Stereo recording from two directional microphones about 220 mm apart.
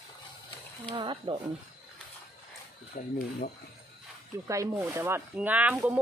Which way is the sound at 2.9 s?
35° left (ahead or behind).